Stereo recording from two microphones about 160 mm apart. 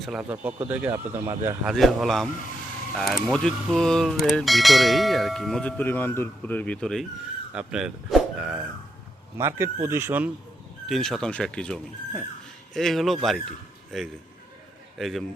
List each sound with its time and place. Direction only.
0.0 s speech: 5° right (ahead or behind)
1.6 s speech: centre (ahead or behind)
7.5 s speech: 5° right (ahead or behind)
10.8 s a man's voice: centre (ahead or behind)